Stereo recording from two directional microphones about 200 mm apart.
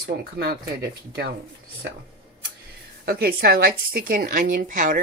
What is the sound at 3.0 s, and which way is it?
A woman's voice, 50° right (ahead or behind).